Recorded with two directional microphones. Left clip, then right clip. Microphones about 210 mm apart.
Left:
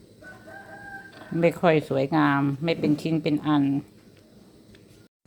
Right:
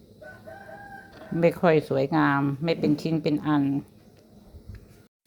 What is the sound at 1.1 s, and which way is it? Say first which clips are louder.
Speech: even; centre (ahead or behind).